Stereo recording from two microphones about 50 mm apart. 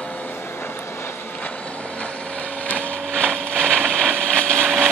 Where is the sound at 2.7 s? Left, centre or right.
Centre.